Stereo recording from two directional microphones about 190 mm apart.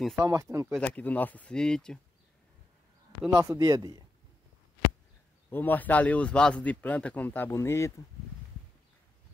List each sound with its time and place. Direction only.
0.1 s speech: 20° right (ahead or behind)
0.7 s a man's voice: 10° left (ahead or behind)
3.3 s speech: 15° right (ahead or behind)
5.5 s a man's voice: 10° left (ahead or behind)